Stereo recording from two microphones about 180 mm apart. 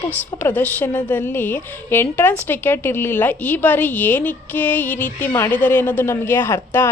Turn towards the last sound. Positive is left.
turn(degrees=15)  # may be behind; listen again after turning